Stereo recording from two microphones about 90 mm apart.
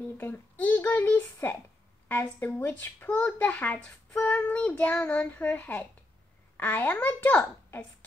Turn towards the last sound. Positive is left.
turn(degrees=20)  # may be behind; listen again after turning